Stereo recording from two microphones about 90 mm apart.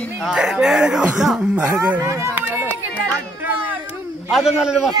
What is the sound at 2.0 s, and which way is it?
Speech, 30° right (ahead or behind).